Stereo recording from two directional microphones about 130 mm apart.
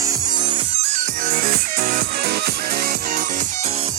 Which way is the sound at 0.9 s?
90° right.